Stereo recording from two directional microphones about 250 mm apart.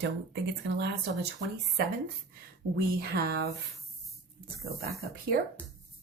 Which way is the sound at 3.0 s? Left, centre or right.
Right.